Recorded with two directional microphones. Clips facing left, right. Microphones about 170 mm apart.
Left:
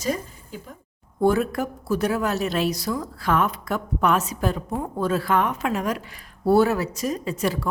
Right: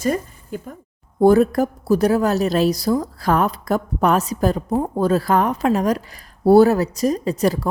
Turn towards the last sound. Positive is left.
turn(degrees=-40)  # may be behind; listen again after turning